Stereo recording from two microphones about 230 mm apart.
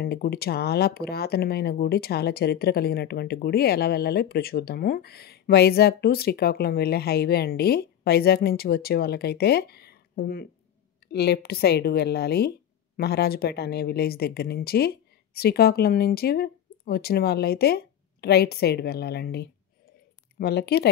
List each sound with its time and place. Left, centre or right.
0.0 s speech: left